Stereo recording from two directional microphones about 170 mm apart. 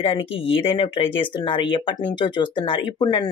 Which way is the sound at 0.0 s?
35° left (ahead or behind).